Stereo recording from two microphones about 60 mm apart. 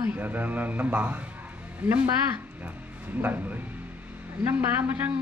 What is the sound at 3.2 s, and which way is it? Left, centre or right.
A man's voice, right.